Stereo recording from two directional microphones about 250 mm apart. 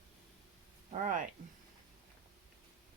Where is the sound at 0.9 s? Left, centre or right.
Right.